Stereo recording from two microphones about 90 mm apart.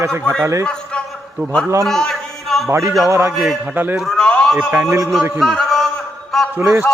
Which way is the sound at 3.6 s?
20° right (ahead or behind).